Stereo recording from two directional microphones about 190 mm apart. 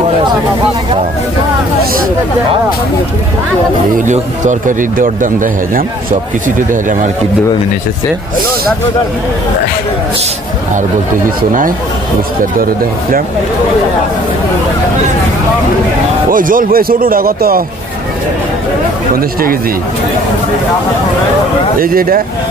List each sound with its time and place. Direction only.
4.0 s speech: 40° right (ahead or behind)
16.3 s speech: 45° right (ahead or behind)
21.7 s speech: 50° right (ahead or behind)